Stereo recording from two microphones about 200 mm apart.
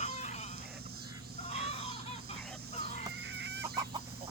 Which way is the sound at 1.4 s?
30° left (ahead or behind).